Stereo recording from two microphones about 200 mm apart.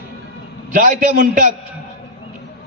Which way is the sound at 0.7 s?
45° right (ahead or behind).